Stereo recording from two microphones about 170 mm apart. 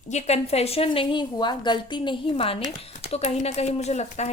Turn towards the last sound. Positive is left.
turn(degrees=40)  # may be behind; listen again after turning